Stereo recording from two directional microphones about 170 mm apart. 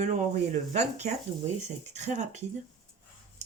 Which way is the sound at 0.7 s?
40° right (ahead or behind).